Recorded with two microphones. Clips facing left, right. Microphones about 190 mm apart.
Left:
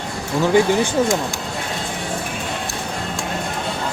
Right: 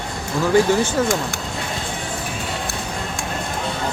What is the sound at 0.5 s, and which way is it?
Speech, 20° left (ahead or behind).